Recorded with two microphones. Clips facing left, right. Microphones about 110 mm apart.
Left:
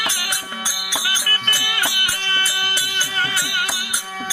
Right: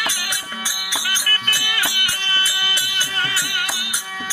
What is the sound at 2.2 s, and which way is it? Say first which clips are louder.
Music: left 1 dB; 45° left (ahead or behind).